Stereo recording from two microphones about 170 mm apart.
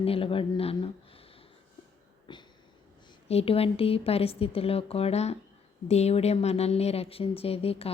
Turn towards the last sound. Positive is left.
turn(degrees=35)  # may be behind; listen again after turning